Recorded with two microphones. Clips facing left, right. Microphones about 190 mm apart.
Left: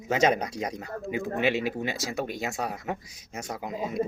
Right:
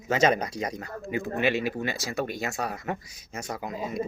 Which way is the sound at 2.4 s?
5° left (ahead or behind).